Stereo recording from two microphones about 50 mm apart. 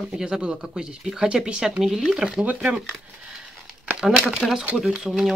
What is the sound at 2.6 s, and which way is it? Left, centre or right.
Speech, centre.